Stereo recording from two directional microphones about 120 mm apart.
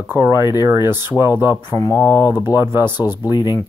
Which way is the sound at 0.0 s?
20° right (ahead or behind).